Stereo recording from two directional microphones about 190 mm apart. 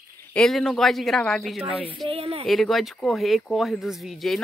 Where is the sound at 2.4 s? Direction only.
Centre (ahead or behind).